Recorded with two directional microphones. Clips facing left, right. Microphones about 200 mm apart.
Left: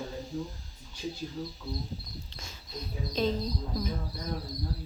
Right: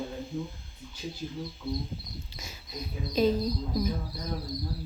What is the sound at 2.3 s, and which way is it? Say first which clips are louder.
Speech: right 1 dB; 10° right (ahead or behind).